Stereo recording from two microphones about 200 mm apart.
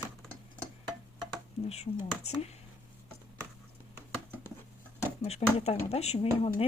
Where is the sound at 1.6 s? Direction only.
35° left (ahead or behind).